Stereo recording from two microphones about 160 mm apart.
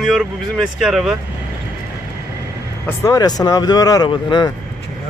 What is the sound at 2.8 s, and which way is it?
Speech, 20° left (ahead or behind).